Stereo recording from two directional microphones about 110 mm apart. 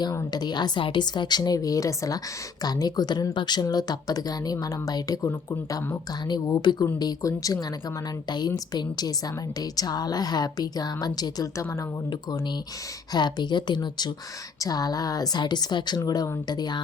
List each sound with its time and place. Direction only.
0.3 s a woman's voice: 40° left (ahead or behind)
13.1 s a woman's voice: 40° left (ahead or behind)